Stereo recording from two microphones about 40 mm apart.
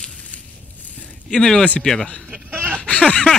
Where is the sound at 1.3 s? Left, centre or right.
Centre.